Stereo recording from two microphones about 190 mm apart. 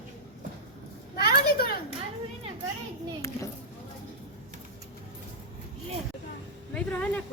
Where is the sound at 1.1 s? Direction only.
55° left (ahead or behind).